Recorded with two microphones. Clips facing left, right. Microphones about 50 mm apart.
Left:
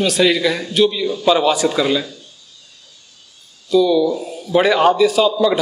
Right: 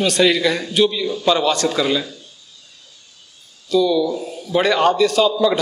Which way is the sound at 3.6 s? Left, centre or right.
Centre.